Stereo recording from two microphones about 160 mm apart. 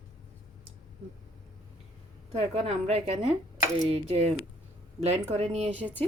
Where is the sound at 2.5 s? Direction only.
40° right (ahead or behind).